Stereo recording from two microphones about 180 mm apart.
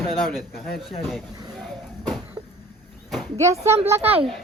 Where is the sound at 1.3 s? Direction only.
20° right (ahead or behind).